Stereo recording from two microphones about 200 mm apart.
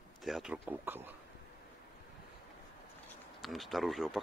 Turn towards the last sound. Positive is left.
turn(degrees=0)  # may be behind; listen again after turning